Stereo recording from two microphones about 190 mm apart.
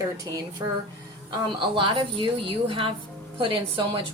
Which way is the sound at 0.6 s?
20° right (ahead or behind).